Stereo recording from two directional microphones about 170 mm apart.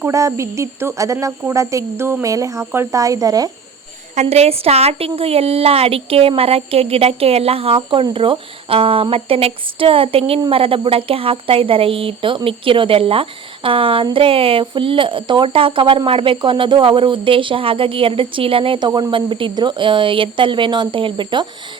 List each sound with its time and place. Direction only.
0.0 s speech: 15° right (ahead or behind)
4.1 s speech: 40° right (ahead or behind)